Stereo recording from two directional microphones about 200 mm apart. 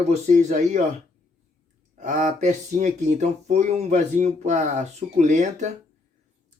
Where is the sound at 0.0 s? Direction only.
35° right (ahead or behind).